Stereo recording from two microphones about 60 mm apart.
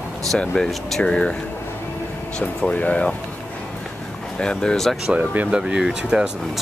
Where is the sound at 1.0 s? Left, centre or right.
Centre.